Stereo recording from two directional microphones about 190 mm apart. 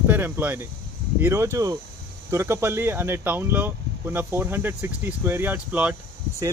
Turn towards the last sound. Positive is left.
turn(degrees=-10)  # may be behind; listen again after turning